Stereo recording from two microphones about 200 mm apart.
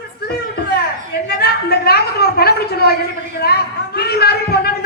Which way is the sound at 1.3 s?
50° left (ahead or behind).